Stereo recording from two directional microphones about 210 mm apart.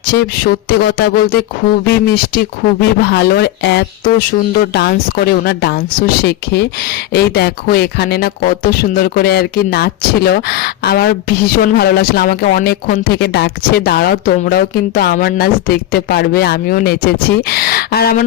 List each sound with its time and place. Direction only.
0.1 s speech: 45° left (ahead or behind)